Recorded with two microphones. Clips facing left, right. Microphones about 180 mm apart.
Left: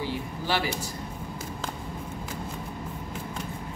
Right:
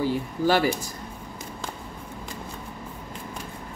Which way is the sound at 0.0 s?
45° right (ahead or behind).